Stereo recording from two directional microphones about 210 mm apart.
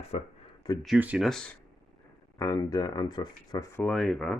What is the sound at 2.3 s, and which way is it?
Speech, 15° left (ahead or behind).